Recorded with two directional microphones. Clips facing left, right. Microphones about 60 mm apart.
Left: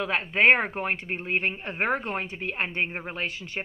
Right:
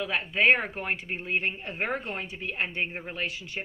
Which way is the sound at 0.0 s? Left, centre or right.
Left.